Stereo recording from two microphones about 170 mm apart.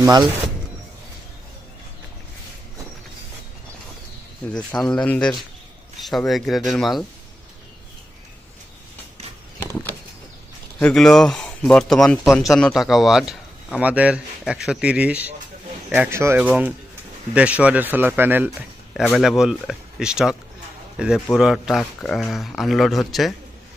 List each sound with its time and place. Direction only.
0.0 s speech: 20° right (ahead or behind)
4.5 s speech: 5° left (ahead or behind)
10.8 s speech: 5° left (ahead or behind)